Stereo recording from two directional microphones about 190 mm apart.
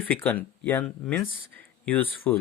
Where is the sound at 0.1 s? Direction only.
10° left (ahead or behind).